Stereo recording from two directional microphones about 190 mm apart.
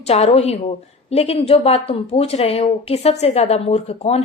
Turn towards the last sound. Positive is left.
turn(degrees=30)  # may be behind; listen again after turning